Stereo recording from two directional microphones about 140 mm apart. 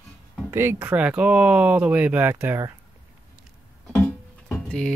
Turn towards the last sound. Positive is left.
turn(degrees=5)  # may be behind; listen again after turning